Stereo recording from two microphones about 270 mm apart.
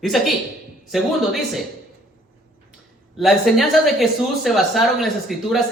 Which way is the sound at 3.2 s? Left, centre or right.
Centre.